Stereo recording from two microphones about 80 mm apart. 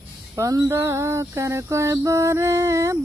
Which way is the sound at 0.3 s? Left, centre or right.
Right.